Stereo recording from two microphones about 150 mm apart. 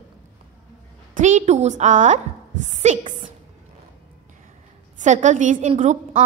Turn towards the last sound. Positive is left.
turn(degrees=-50)  # may be behind; listen again after turning